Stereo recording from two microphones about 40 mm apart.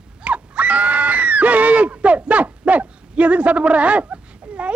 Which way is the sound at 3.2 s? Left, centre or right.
Right.